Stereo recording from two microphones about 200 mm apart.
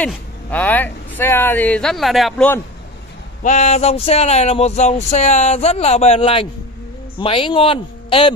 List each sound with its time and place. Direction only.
0.0 s speech: 5° left (ahead or behind)
3.4 s speech: 35° left (ahead or behind)